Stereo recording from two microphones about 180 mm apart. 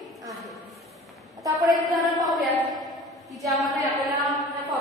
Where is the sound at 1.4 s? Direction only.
20° right (ahead or behind).